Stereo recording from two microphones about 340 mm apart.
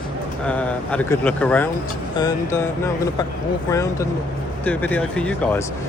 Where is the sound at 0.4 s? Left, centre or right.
Centre.